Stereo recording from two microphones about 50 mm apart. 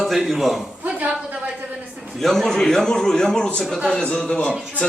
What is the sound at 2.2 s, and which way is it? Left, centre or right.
A man's voice, centre.